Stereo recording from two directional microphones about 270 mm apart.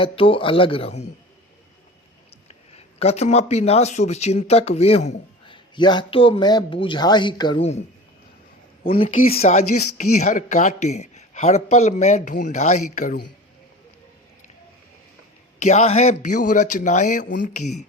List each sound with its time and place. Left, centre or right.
0.0 s speech: centre
2.5 s speech: left
9.0 s speech: left
15.6 s speech: left